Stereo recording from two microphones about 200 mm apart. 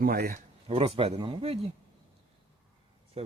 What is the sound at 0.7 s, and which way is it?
Speech, 30° right (ahead or behind).